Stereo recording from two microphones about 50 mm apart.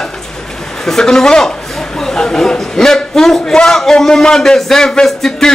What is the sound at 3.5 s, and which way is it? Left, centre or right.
A man's voice, centre.